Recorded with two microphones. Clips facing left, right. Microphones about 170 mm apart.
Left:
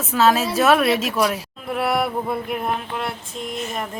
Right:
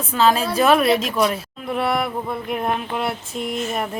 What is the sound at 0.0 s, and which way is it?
A woman's voice, centre (ahead or behind).